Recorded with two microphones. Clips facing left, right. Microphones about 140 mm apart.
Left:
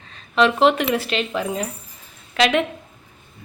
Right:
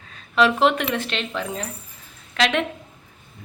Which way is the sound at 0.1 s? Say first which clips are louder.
Left 1 dB; centre (ahead or behind).